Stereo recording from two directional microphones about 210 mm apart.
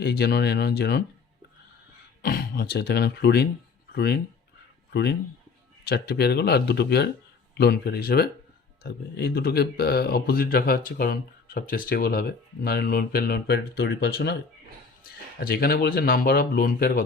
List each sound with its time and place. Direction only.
0.0 s speech: 50° left (ahead or behind)
2.2 s speech: 45° left (ahead or behind)
15.4 s speech: 45° left (ahead or behind)